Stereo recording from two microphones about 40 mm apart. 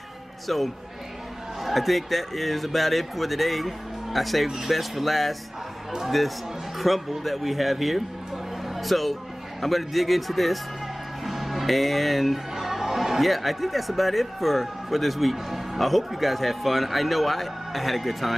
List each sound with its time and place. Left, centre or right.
0.5 s speech: centre